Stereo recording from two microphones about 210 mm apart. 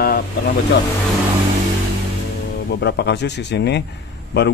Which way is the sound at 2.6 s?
50° left (ahead or behind).